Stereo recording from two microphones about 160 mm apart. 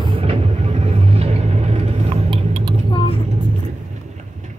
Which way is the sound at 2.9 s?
35° left (ahead or behind).